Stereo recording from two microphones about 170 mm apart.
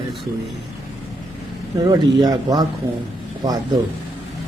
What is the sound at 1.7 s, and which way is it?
A man's voice, 25° right (ahead or behind).